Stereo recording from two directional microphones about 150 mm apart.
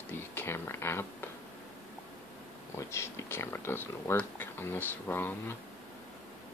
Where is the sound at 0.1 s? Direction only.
15° left (ahead or behind).